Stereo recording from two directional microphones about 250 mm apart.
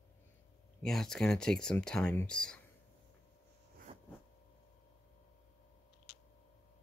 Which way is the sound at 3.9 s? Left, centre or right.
Right.